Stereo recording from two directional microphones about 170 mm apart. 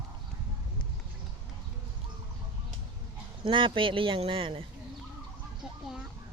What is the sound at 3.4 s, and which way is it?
Speech, 30° right (ahead or behind).